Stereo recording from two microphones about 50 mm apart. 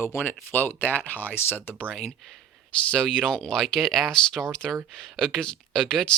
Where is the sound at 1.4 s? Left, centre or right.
Left.